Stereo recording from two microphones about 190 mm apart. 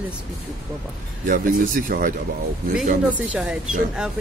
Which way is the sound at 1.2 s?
45° right (ahead or behind).